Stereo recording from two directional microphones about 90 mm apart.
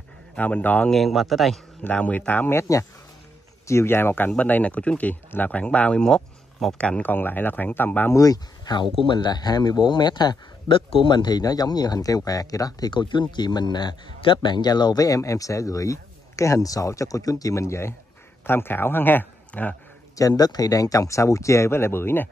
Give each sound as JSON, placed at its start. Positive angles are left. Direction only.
{"t": 0.4, "sound": "speech", "side_deg": 20}
{"t": 0.8, "sound": "speech", "side_deg": 0}
{"t": 1.8, "sound": "speech", "side_deg": 15}
{"t": 3.6, "sound": "speech", "side_deg": 30}
{"t": 8.1, "sound": "speech", "side_deg": 40}
{"t": 9.0, "sound": "speech", "side_deg": 60}
{"t": 10.7, "sound": "speech", "side_deg": 75}
{"t": 12.9, "sound": "a man's voice", "side_deg": 60}
{"t": 20.2, "sound": "a man's voice", "side_deg": 45}